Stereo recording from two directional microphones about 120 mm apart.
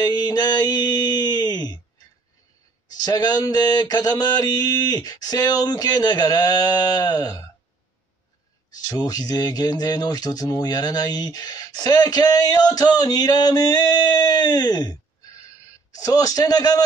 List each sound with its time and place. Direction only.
0.0 s a sound: 35° left (ahead or behind)
2.9 s speech: 35° left (ahead or behind)
8.7 s speech: 30° left (ahead or behind)